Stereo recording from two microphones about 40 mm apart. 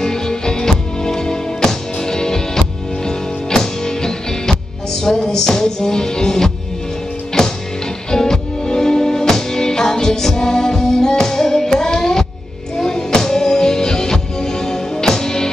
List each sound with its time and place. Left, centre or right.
0.0 s music: centre